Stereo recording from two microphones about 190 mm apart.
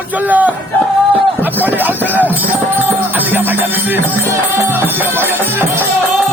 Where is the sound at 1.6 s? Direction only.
10° right (ahead or behind).